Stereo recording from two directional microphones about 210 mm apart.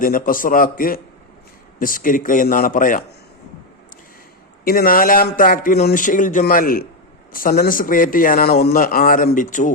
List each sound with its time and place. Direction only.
0.0 s a man's voice: 40° left (ahead or behind)
4.6 s a man's voice: 45° left (ahead or behind)